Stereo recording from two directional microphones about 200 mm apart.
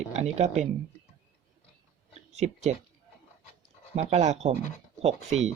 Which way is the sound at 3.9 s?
30° right (ahead or behind).